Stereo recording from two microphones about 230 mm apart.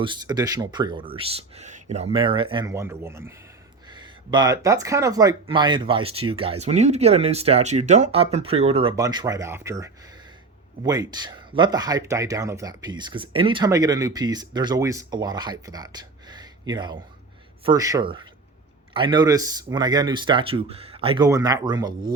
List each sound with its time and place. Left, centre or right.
0.0 s speech: centre